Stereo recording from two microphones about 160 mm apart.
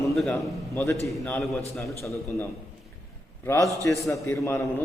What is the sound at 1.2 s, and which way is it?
Speech, 20° left (ahead or behind).